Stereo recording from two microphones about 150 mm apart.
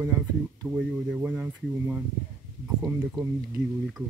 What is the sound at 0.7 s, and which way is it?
Speech, 10° right (ahead or behind).